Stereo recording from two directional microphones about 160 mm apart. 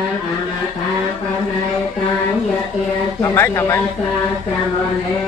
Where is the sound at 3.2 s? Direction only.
15° left (ahead or behind).